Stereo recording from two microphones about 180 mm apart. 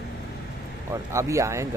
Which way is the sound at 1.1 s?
15° right (ahead or behind).